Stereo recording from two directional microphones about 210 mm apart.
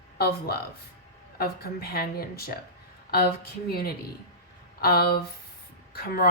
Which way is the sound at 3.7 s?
45° left (ahead or behind).